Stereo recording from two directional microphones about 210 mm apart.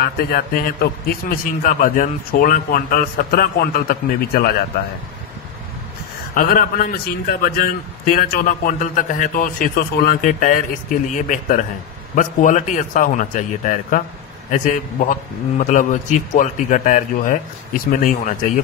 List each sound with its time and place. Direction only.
0.0 s a man's voice: 45° left (ahead or behind)
6.3 s a man's voice: 45° left (ahead or behind)